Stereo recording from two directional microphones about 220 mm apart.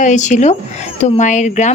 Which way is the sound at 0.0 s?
35° left (ahead or behind).